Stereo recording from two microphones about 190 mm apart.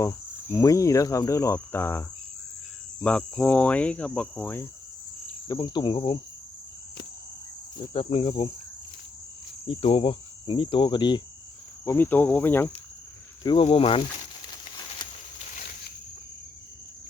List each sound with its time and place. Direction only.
0.0 s cricket: 15° left (ahead or behind)
5.5 s cricket: 20° left (ahead or behind)
7.8 s cricket: 30° left (ahead or behind)
9.6 s cricket: 30° left (ahead or behind)
11.9 s cricket: 10° left (ahead or behind)
13.4 s cricket: 25° left (ahead or behind)